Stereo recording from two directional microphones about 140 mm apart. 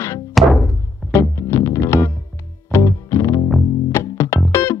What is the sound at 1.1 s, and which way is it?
Music, 20° left (ahead or behind).